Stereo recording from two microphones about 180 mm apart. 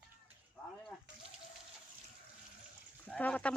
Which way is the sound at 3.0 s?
10° left (ahead or behind).